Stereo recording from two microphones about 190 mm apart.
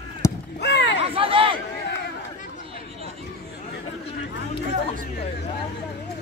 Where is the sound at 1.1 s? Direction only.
30° right (ahead or behind).